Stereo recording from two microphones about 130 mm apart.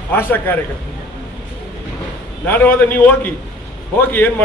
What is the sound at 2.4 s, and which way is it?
Speech, 15° left (ahead or behind).